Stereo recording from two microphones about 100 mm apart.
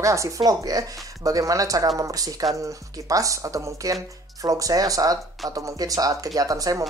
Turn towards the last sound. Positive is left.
turn(degrees=-35)  # may be behind; listen again after turning